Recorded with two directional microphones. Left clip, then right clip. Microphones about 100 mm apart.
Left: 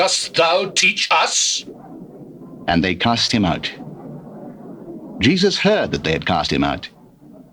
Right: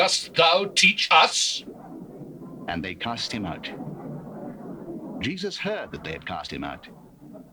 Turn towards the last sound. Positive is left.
turn(degrees=40)  # may be behind; listen again after turning